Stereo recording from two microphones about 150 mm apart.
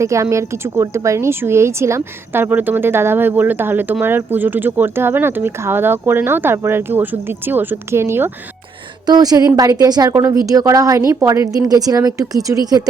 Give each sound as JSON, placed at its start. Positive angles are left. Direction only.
{"t": 0.0, "sound": "speech", "side_deg": -20}
{"t": 9.0, "sound": "a woman's voice", "side_deg": -25}